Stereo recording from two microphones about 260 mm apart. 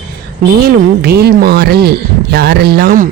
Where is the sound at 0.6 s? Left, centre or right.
Right.